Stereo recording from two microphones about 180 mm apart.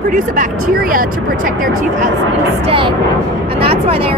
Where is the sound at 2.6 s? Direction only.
30° right (ahead or behind).